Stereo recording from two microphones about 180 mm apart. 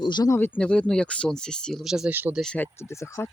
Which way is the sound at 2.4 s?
10° left (ahead or behind).